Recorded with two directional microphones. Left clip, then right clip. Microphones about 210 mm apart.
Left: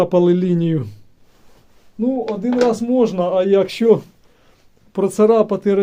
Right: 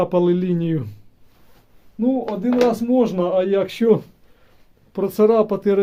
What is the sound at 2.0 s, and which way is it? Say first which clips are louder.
Speech: left 1 dB; 15° left (ahead or behind).